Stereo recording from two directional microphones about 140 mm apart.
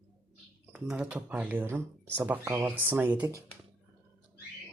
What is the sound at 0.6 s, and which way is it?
Speech, 10° right (ahead or behind).